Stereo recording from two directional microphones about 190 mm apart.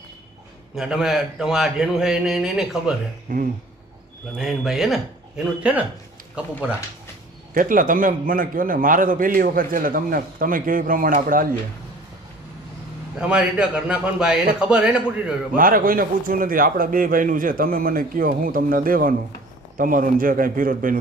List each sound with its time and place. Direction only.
0.8 s a man's voice: centre (ahead or behind)
3.3 s a man's voice: 50° right (ahead or behind)
4.4 s a man's voice: centre (ahead or behind)
7.5 s a man's voice: 45° right (ahead or behind)
13.1 s a man's voice: 5° right (ahead or behind)
15.5 s a man's voice: 50° right (ahead or behind)